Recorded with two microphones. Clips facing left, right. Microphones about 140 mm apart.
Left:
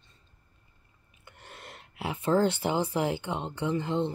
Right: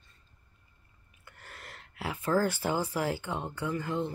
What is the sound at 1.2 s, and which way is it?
Speech, 20° left (ahead or behind).